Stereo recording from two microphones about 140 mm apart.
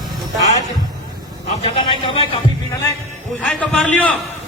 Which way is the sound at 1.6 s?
40° left (ahead or behind).